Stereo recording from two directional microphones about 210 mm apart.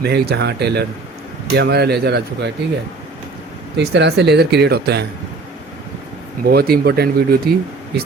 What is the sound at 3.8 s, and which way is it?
Speech, 55° right (ahead or behind).